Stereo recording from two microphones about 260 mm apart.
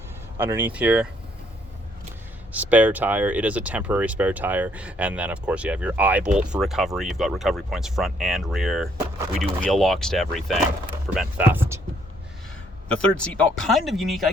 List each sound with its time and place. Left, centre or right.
0.3 s speech: centre
2.5 s speech: centre
12.9 s speech: centre